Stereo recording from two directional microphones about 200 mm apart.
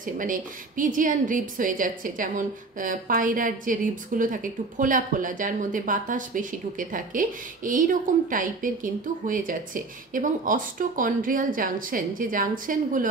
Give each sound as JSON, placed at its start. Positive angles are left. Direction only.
{"t": 0.0, "sound": "a woman's voice", "side_deg": -40}